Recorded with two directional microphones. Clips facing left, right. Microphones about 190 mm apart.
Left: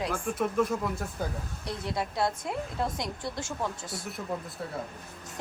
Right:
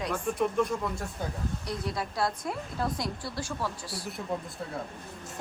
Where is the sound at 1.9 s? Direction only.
25° left (ahead or behind).